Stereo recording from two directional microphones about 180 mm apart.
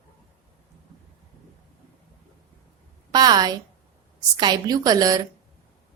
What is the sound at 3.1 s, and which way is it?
A woman's voice, 20° right (ahead or behind).